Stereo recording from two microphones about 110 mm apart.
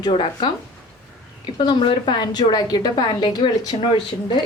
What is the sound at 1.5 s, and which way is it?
A woman's voice, 45° left (ahead or behind).